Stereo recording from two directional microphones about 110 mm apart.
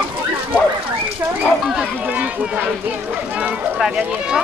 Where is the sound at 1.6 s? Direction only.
Centre (ahead or behind).